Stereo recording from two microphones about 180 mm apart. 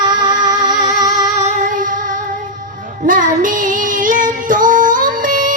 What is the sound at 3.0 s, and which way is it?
Child singing, 45° right (ahead or behind).